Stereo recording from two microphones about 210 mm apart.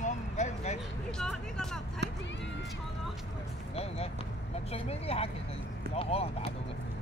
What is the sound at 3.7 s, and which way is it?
Vehicle, 30° left (ahead or behind).